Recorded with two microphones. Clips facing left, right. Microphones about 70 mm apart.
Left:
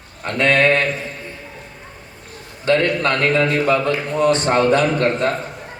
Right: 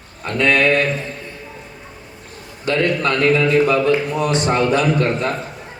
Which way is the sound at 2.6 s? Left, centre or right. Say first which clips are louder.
Left 1 dB; left.